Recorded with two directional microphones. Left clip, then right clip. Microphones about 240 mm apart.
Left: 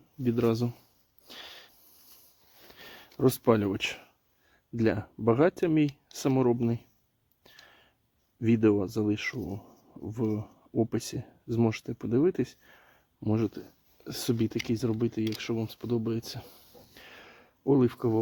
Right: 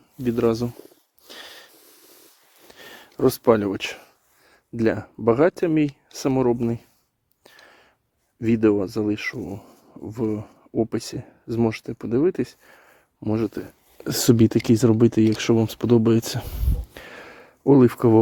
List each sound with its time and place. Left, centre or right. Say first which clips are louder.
0.2 s speech: right 6 dB; right
1.3 s wheeze: right 5 dB; right
2.7 s a sound: right 7 dB; right
4.8 s speech: right 6 dB; right
7.4 s whispering: right 6 dB; right
8.4 s speech: right 5 dB; right